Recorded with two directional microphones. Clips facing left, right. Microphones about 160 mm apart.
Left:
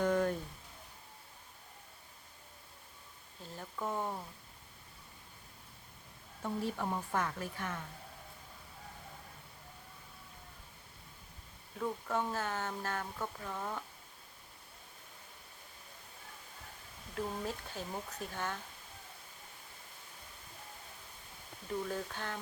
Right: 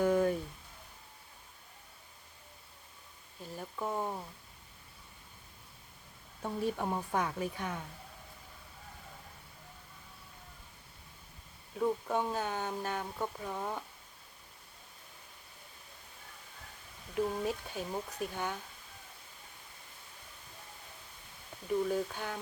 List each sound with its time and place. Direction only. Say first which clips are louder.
0.0 s a sound: right 3 dB; 5° right (ahead or behind)
3.4 s a sound: right 2 dB; 10° right (ahead or behind)
6.4 s speech: right 2 dB; 15° right (ahead or behind)
11.8 s speech: right 4 dB; 15° right (ahead or behind)
17.2 s speech: right 5 dB; 15° right (ahead or behind)
21.8 s speech: right 5 dB; 10° right (ahead or behind)